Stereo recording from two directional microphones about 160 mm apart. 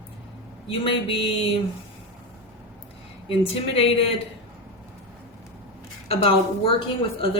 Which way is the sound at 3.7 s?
35° left (ahead or behind).